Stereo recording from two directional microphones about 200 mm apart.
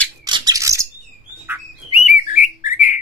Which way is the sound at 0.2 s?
20° right (ahead or behind).